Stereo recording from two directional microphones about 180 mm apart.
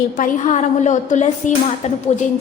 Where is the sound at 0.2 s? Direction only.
40° left (ahead or behind).